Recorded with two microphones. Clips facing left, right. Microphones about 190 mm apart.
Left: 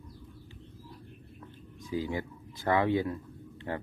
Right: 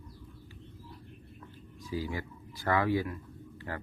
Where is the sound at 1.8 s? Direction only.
20° left (ahead or behind).